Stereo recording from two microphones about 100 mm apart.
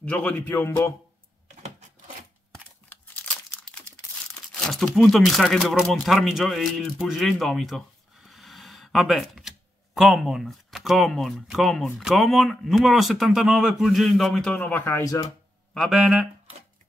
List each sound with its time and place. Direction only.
0.0 s speech: 15° left (ahead or behind)
2.9 s crumpling: 10° left (ahead or behind)
4.9 s speech: 5° left (ahead or behind)
14.6 s speech: 20° left (ahead or behind)
15.7 s speech: centre (ahead or behind)